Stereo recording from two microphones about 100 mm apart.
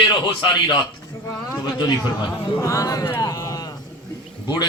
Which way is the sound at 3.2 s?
35° left (ahead or behind).